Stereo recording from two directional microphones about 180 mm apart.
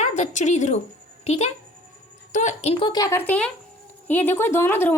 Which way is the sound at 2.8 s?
20° left (ahead or behind).